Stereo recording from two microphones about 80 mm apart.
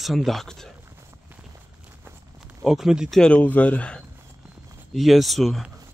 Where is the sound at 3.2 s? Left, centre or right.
Centre.